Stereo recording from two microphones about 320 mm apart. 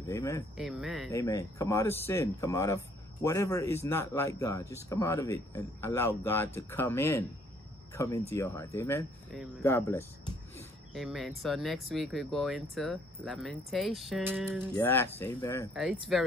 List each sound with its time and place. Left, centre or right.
0.0 s speech: centre
0.6 s speech: centre